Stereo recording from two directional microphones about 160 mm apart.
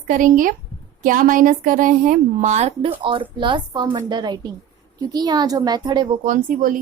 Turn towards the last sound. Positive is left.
turn(degrees=-55)  # may be behind; listen again after turning